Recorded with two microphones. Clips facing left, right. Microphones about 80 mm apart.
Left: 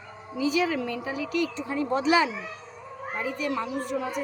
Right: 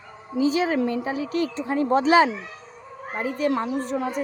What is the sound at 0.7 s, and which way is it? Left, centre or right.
Speech, right.